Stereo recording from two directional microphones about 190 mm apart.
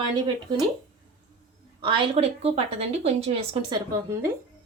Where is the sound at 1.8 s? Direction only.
25° right (ahead or behind).